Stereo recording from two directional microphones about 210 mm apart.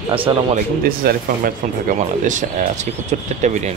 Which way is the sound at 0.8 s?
45° right (ahead or behind).